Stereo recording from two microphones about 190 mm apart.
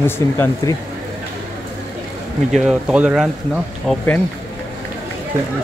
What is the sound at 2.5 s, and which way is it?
Speech, 5° right (ahead or behind).